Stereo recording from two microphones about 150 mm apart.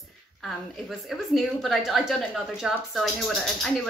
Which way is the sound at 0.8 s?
Centre (ahead or behind).